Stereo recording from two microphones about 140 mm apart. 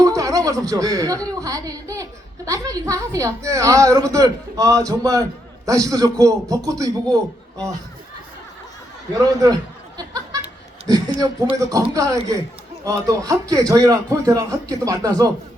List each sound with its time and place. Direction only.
0.0 s a woman's voice: 25° right (ahead or behind)
9.1 s a woman's voice: 25° right (ahead or behind)
10.8 s a man's voice: 25° right (ahead or behind)